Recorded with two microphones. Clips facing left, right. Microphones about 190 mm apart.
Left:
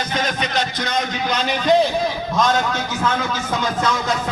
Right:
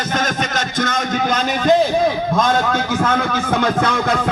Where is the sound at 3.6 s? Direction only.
60° right (ahead or behind).